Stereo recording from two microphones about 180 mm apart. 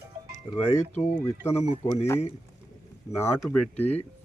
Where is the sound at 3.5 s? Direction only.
10° left (ahead or behind).